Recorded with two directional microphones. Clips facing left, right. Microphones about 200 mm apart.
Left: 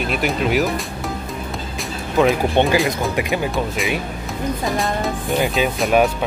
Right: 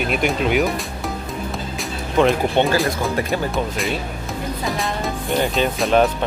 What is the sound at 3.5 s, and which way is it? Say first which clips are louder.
Speech: left 1 dB; centre (ahead or behind).